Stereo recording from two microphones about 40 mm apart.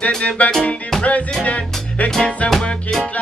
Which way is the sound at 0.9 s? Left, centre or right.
Centre.